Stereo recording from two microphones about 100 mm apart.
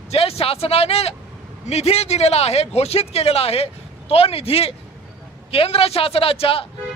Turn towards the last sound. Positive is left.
turn(degrees=70)  # may be behind; listen again after turning